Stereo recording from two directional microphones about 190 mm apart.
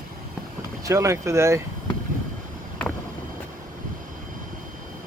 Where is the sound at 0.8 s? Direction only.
15° right (ahead or behind).